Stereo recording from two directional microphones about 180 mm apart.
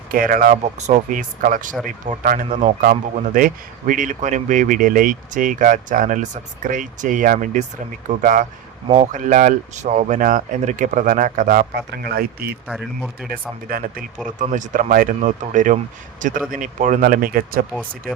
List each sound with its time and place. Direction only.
0.1 s speech: 50° right (ahead or behind)
11.7 s speech: 65° right (ahead or behind)
12.6 s speech: 5° right (ahead or behind)
13.7 s speech: 55° right (ahead or behind)
14.3 s speech: 45° right (ahead or behind)